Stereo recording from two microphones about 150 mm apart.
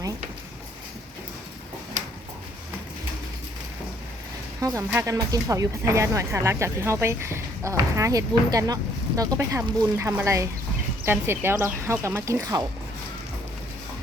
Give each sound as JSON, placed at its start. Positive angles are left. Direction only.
{"t": 4.9, "sound": "speech", "side_deg": -20}